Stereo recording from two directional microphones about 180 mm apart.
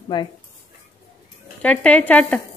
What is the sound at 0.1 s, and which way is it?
Speech, 25° left (ahead or behind).